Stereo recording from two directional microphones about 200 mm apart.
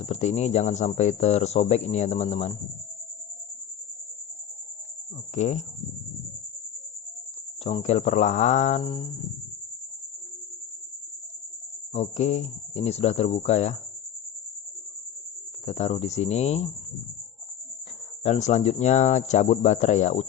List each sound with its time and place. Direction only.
0.0 s speech: 35° left (ahead or behind)
5.3 s speech: 35° left (ahead or behind)
7.6 s speech: 35° left (ahead or behind)
8.8 s a sound: 25° left (ahead or behind)
11.9 s speech: 35° left (ahead or behind)
15.6 s speech: 35° left (ahead or behind)
18.2 s speech: 35° left (ahead or behind)